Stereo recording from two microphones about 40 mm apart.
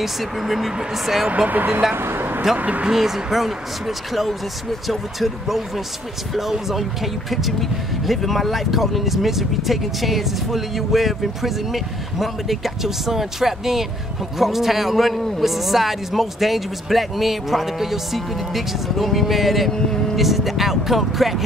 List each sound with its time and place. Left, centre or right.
0.0 s speech: centre
1.5 s speech: right
2.0 s vehicle: right
2.5 s speech: right
2.9 s speech: centre
6.7 s speech: centre